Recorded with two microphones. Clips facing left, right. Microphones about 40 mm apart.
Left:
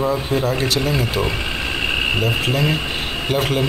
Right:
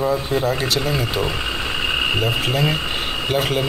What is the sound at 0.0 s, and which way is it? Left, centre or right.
A man's voice, centre.